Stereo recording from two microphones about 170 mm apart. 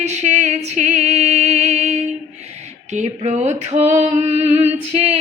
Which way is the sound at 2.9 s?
40° right (ahead or behind).